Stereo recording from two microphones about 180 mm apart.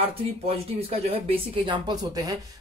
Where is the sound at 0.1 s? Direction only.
35° right (ahead or behind).